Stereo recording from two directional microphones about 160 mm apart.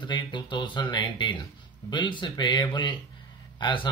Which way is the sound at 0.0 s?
30° left (ahead or behind).